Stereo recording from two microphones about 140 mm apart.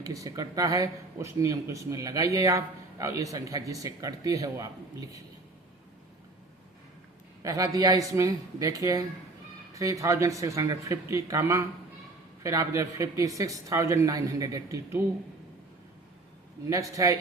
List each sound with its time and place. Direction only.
0.0 s speech: 25° right (ahead or behind)
7.4 s speech: 25° right (ahead or behind)
16.9 s speech: 25° right (ahead or behind)